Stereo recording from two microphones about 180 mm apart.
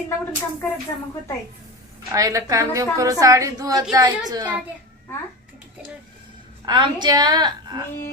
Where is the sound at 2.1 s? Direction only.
20° right (ahead or behind).